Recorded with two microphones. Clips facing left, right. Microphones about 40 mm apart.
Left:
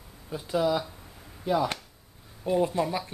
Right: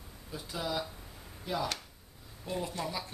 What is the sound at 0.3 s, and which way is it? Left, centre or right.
Speech, centre.